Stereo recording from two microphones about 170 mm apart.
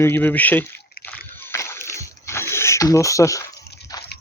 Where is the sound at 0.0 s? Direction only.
10° left (ahead or behind).